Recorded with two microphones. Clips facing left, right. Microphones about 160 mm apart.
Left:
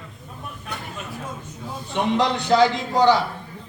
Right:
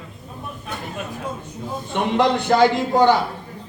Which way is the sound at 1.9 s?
55° right (ahead or behind).